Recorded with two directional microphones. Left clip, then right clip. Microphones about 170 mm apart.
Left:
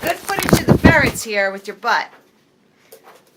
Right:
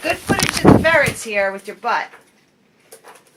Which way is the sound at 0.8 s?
Centre (ahead or behind).